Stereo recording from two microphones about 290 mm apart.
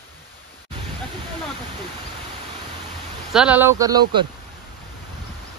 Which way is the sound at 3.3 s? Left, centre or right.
Centre.